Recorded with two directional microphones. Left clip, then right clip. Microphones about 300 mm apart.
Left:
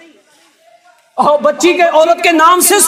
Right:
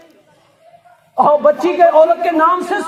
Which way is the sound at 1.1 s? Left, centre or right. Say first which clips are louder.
Even; left.